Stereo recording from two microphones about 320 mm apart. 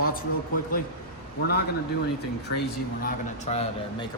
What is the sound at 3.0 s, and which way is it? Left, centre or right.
Speech, left.